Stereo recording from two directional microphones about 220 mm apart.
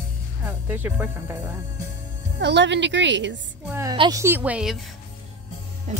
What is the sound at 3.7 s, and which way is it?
Speech, 10° right (ahead or behind).